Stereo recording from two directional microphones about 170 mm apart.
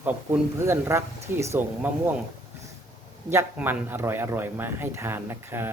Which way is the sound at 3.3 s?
15° right (ahead or behind).